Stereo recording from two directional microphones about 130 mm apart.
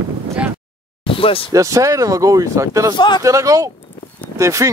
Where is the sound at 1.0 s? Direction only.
45° left (ahead or behind).